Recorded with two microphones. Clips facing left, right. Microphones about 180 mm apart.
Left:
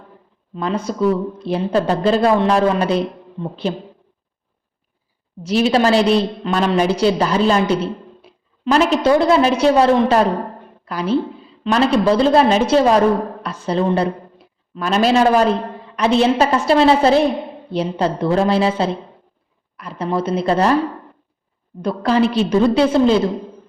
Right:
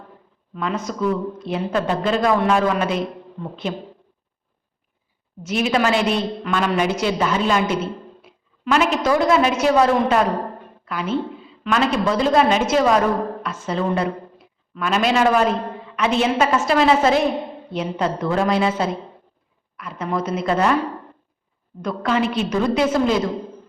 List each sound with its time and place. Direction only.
0.5 s a woman's voice: 30° left (ahead or behind)
5.4 s a woman's voice: 35° left (ahead or behind)
21.8 s a woman's voice: 35° left (ahead or behind)